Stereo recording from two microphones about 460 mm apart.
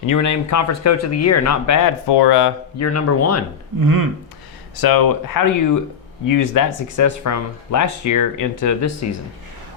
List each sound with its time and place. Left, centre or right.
0.0 s speech: left
2.0 s speech: left
2.7 s speech: left
3.8 s a sound: right
4.8 s speech: left